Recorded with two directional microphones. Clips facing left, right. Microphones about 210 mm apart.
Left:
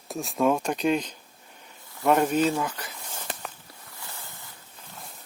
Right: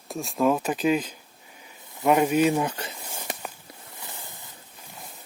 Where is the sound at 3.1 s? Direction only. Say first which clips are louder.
Right 2 dB; 10° right (ahead or behind).